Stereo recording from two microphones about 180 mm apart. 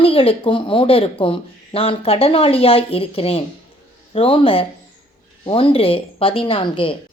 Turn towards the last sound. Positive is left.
turn(degrees=30)  # may be behind; listen again after turning